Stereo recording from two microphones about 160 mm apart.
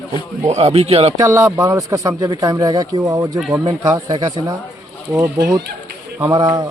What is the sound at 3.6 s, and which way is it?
Speech, 25° right (ahead or behind).